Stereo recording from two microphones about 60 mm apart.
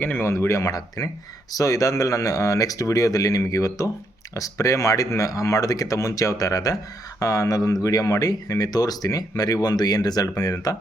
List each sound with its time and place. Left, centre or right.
0.0 s speech: left
0.3 s speech: left
0.6 s speech: left